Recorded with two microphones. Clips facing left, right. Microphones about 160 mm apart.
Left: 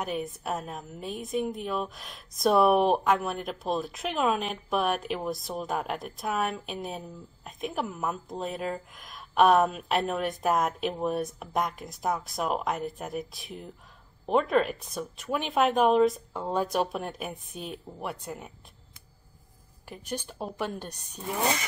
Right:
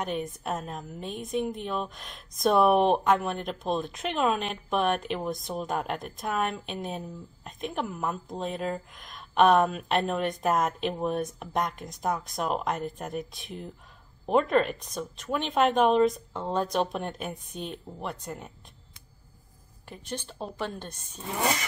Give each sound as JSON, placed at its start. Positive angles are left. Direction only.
{"t": 0.0, "sound": "a woman's voice", "side_deg": 5}
{"t": 19.9, "sound": "speech", "side_deg": 10}